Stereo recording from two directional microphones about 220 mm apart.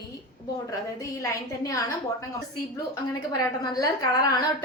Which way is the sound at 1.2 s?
15° left (ahead or behind).